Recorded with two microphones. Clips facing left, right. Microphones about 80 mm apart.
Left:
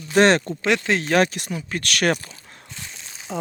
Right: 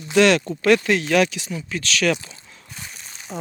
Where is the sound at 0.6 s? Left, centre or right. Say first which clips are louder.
Right 4 dB; left.